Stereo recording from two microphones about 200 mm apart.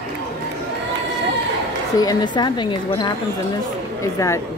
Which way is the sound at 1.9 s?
20° left (ahead or behind).